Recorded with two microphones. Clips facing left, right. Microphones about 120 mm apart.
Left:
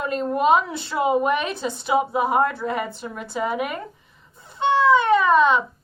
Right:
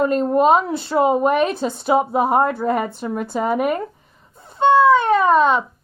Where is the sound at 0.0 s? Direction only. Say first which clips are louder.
Right 6 dB; 40° right (ahead or behind).